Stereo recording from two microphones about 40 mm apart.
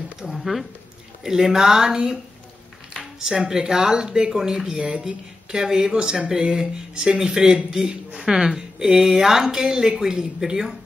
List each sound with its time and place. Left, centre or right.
0.2 s speech: centre
1.2 s speech: centre
4.4 s speech: centre
4.8 s speech: right